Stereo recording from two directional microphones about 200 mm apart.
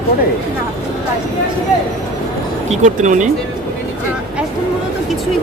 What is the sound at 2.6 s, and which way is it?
Speech, 35° right (ahead or behind).